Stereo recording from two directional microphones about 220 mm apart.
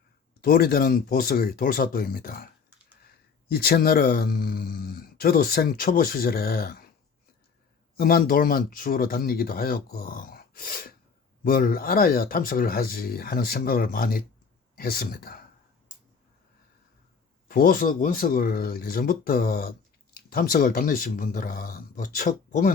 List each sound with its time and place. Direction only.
0.4 s speech: 40° left (ahead or behind)
3.5 s speech: 45° left (ahead or behind)
7.9 s speech: 40° left (ahead or behind)
17.5 s speech: 40° left (ahead or behind)